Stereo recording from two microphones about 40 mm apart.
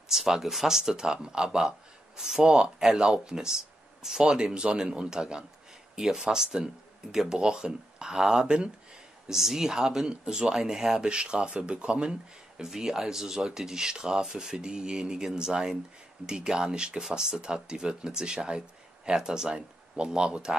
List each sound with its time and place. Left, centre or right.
0.1 s speech: centre
1.6 s a sound: centre
2.4 s speech: right
9.3 s speech: centre
11.0 s speech: right
12.1 s speech: centre